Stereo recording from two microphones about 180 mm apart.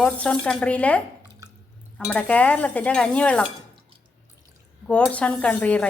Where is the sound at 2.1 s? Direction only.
5° left (ahead or behind).